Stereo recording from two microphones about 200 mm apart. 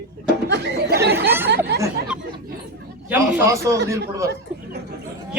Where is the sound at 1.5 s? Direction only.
55° right (ahead or behind).